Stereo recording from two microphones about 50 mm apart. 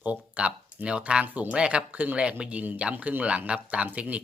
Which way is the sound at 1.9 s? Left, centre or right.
Right.